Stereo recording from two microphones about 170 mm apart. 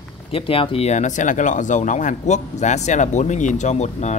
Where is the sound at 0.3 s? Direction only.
35° left (ahead or behind).